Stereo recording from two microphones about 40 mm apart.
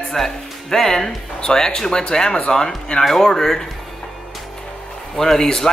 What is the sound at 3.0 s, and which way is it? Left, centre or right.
Speech, centre.